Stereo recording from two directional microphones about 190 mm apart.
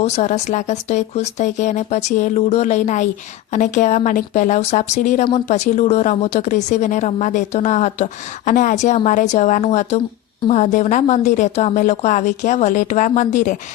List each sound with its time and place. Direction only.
0.0 s a woman's voice: 40° left (ahead or behind)